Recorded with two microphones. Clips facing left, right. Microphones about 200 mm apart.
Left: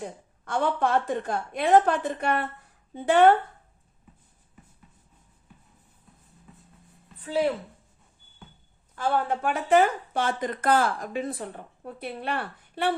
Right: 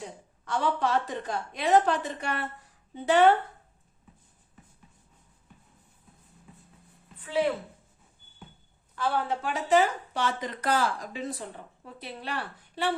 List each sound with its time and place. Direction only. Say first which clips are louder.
0.0 s a woman's voice: left 4 dB; 50° left (ahead or behind)
9.0 s speech: left 3 dB; 50° left (ahead or behind)